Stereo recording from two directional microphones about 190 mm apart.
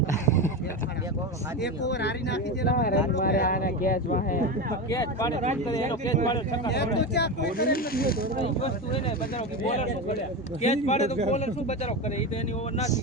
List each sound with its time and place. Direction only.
1.6 s speech: 60° left (ahead or behind); by 4.4 s 45° left (ahead or behind)
4.9 s speech: 20° left (ahead or behind)
6.7 s speech: 60° left (ahead or behind)
8.4 s a man's voice: 30° left (ahead or behind)